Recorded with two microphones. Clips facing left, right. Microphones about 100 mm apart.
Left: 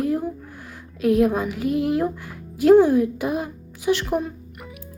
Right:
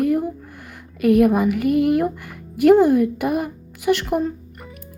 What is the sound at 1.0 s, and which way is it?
Speech, 65° right (ahead or behind).